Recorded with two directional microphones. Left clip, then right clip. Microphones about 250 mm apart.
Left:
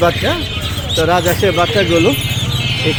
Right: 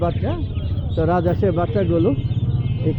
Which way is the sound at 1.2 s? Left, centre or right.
Centre.